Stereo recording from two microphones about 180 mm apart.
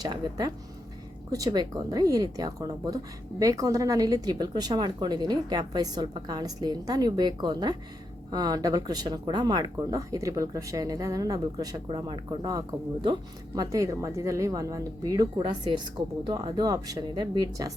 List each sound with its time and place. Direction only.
0.0 s speech: 20° right (ahead or behind)